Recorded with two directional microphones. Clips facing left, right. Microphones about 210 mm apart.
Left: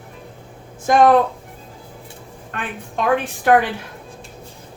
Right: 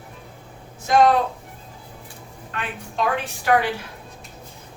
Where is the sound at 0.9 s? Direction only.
50° left (ahead or behind).